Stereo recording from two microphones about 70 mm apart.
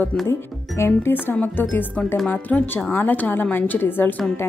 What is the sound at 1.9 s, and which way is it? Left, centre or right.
Speech, centre.